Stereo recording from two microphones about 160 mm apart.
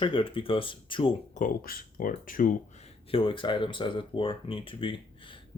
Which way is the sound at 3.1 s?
35° left (ahead or behind).